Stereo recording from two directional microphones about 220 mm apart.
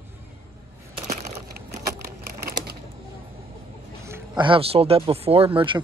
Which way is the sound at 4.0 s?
10° right (ahead or behind).